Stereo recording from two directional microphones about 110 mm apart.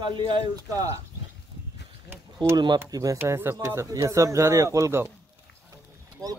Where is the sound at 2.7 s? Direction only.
30° right (ahead or behind).